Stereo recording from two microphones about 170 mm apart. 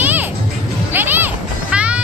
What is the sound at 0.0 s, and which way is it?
Music, 10° right (ahead or behind).